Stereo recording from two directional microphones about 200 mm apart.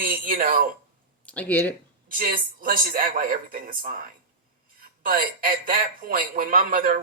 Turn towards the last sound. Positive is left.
turn(degrees=-45)  # may be behind; listen again after turning